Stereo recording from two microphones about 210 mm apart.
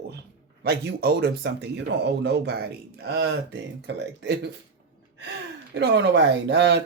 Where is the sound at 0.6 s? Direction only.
50° right (ahead or behind).